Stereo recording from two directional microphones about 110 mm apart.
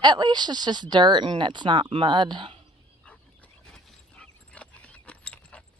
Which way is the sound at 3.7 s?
10° left (ahead or behind).